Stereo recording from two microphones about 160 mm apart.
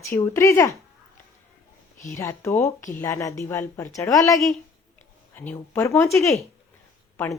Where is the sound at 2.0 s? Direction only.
20° left (ahead or behind).